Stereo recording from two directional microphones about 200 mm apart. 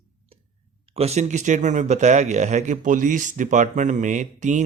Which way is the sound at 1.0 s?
35° right (ahead or behind).